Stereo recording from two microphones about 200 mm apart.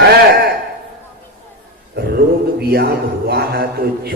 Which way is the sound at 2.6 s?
50° right (ahead or behind).